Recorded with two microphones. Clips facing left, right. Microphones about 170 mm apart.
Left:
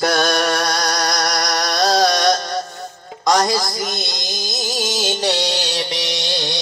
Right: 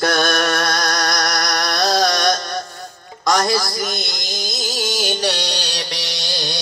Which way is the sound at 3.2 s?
20° left (ahead or behind).